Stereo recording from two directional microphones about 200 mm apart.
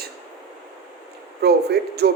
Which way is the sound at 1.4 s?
55° right (ahead or behind).